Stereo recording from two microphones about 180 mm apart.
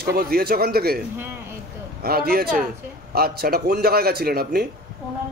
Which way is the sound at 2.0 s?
60° right (ahead or behind).